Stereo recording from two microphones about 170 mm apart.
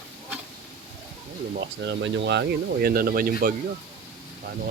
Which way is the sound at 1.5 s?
90° right.